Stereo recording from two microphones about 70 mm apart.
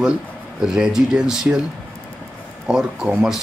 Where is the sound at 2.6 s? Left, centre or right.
Centre.